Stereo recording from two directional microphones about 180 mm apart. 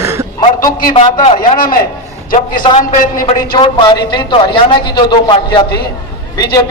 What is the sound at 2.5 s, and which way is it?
Speech, 25° left (ahead or behind).